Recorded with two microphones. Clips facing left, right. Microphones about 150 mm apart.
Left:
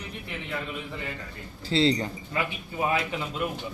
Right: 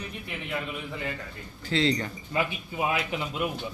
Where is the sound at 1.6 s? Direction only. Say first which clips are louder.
Left 2 dB; 35° left (ahead or behind).